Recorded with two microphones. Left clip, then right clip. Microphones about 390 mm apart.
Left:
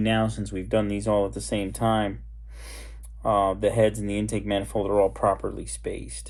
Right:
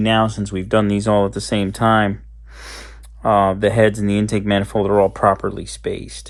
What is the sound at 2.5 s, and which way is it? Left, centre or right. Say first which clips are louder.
Gasp: right 10 dB; right.